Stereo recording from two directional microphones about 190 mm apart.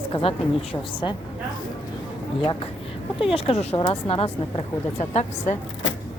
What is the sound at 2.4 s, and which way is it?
A woman's voice, 30° left (ahead or behind).